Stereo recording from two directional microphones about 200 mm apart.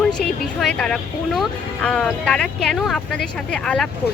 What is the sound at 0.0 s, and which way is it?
Speech, 5° left (ahead or behind).